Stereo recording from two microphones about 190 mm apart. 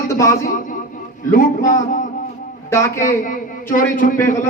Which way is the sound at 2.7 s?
15° left (ahead or behind).